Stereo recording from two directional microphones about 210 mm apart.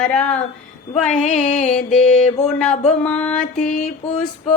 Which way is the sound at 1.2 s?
35° left (ahead or behind).